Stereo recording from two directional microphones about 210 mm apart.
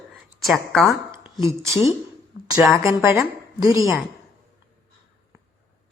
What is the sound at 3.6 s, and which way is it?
Speech, 15° right (ahead or behind).